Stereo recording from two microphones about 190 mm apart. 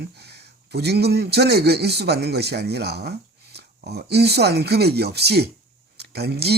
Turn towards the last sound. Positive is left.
turn(degrees=-60)  # may be behind; listen again after turning